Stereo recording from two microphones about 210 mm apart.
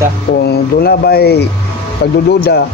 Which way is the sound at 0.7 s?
45° left (ahead or behind).